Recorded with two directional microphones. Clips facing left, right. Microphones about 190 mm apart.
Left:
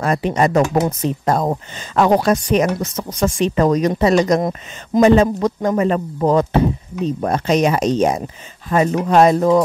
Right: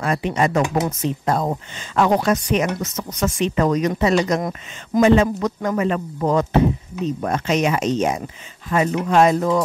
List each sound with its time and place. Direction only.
0.0 s speech: 40° left (ahead or behind)